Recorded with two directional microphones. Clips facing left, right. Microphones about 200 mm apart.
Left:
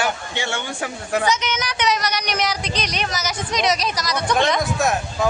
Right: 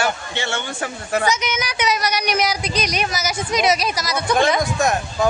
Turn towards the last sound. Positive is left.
turn(degrees=0)  # may be behind; listen again after turning